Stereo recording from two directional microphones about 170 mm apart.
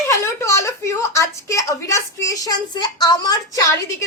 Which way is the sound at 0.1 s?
15° left (ahead or behind).